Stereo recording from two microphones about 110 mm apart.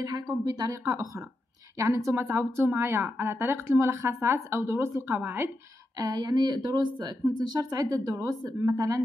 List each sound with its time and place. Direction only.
0.5 s a woman's voice: 35° right (ahead or behind)
5.9 s a woman's voice: 35° right (ahead or behind)